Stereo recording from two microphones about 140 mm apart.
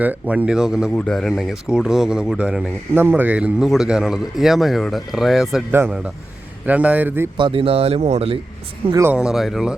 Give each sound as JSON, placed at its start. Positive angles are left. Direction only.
{"t": 0.0, "sound": "speech", "side_deg": -10}
{"t": 6.7, "sound": "a man's voice", "side_deg": -10}
{"t": 7.3, "sound": "speech", "side_deg": -40}
{"t": 9.0, "sound": "speech", "side_deg": -5}